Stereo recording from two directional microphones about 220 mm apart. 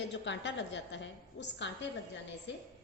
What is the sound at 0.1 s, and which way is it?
A woman's voice, 55° left (ahead or behind).